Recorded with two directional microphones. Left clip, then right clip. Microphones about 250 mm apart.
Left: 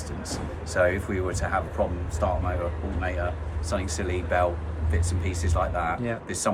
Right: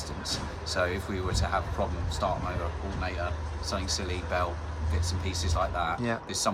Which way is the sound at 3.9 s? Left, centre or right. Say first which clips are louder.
Left 7 dB; centre.